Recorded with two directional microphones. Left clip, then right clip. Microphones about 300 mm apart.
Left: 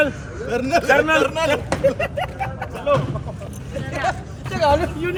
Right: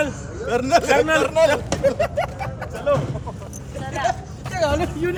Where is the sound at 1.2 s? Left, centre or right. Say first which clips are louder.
Right 4 dB; right.